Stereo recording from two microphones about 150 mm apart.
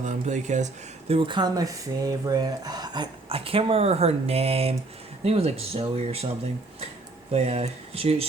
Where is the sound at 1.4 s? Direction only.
25° right (ahead or behind); by 6.2 s 40° right (ahead or behind).